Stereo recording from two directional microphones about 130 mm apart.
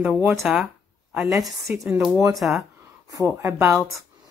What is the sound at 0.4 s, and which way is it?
A woman's voice, 10° right (ahead or behind).